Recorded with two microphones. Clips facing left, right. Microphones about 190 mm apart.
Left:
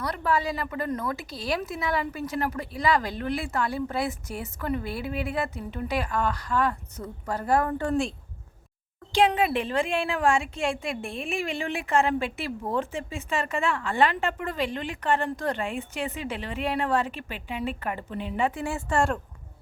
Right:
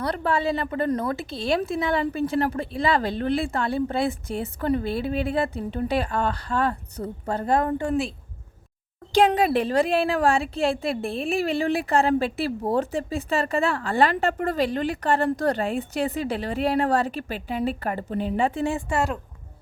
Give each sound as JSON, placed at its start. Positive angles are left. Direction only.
{"t": 0.0, "sound": "a woman's voice", "side_deg": -30}
{"t": 9.1, "sound": "a woman's voice", "side_deg": -40}
{"t": 18.9, "sound": "speech", "side_deg": -5}